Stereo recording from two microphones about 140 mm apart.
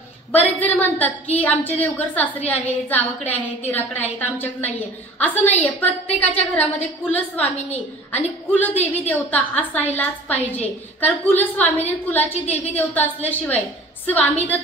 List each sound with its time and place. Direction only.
0.3 s a woman's voice: 10° left (ahead or behind)
6.1 s a woman's voice: 50° left (ahead or behind)
6.5 s a woman's voice: 10° left (ahead or behind)